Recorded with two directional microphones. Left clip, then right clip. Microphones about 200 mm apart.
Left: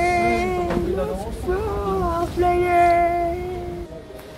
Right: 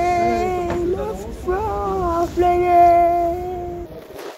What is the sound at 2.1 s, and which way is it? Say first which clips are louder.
Child singing: right 4 dB; 25° right (ahead or behind).